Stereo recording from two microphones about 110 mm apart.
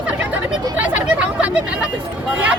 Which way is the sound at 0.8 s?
15° right (ahead or behind).